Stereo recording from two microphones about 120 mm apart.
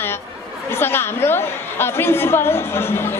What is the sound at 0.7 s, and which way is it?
A woman's voice, 20° left (ahead or behind).